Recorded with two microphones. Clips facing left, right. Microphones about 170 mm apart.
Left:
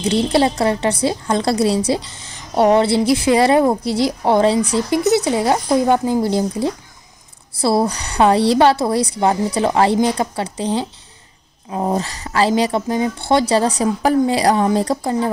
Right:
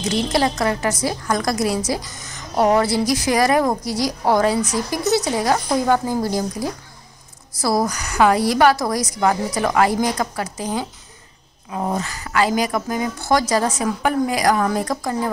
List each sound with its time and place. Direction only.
0.0 s a woman's voice: 30° left (ahead or behind)